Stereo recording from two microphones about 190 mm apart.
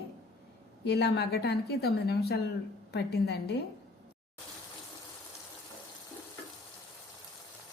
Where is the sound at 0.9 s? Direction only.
60° left (ahead or behind).